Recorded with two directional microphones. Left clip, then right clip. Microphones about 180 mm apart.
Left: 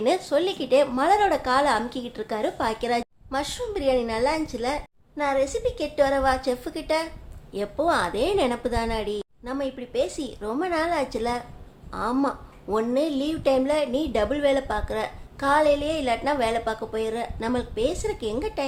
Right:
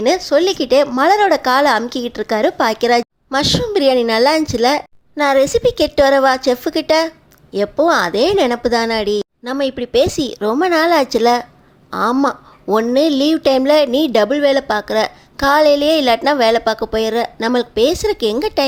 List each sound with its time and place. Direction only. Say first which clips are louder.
0.3 s a woman's voice: right 9 dB; 35° right (ahead or behind)